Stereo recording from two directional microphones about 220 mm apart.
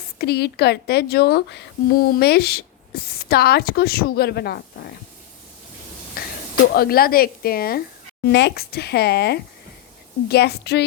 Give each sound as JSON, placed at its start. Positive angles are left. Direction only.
{"t": 0.2, "sound": "speech", "side_deg": 45}
{"t": 6.2, "sound": "a sound", "side_deg": 40}
{"t": 6.7, "sound": "speech", "side_deg": 45}